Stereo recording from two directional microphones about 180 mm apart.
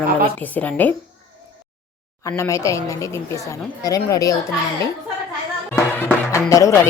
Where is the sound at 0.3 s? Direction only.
10° left (ahead or behind).